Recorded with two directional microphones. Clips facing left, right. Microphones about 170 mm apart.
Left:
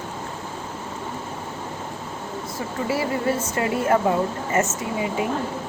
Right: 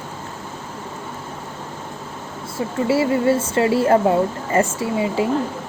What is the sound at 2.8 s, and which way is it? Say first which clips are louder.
Speech: right 6 dB; 25° right (ahead or behind).